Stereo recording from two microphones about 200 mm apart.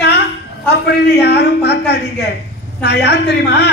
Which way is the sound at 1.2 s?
55° left (ahead or behind).